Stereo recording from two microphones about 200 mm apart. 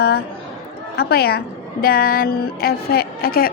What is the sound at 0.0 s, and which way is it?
A woman's voice, 50° left (ahead or behind).